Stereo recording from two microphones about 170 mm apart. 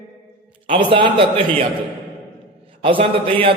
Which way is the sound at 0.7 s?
30° right (ahead or behind).